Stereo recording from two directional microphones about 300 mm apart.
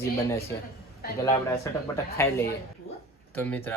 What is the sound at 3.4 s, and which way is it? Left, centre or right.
Speech, centre.